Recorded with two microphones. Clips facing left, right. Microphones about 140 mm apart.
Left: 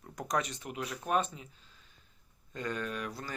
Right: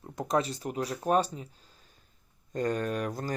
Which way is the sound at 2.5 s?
45° right (ahead or behind).